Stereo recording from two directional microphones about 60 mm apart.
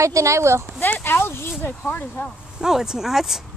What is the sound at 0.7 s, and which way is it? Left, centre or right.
Speech, left.